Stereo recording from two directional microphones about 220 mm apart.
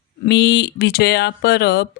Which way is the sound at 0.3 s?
50° left (ahead or behind).